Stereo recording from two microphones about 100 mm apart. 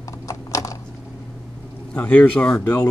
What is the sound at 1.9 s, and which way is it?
Speech, 15° left (ahead or behind).